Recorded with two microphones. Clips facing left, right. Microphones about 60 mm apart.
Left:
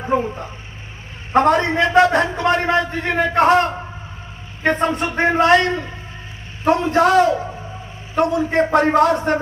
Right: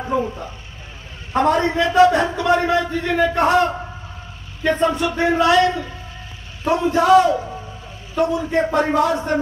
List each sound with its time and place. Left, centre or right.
0.1 s a man's voice: left
1.3 s a man's voice: left
4.6 s a man's voice: left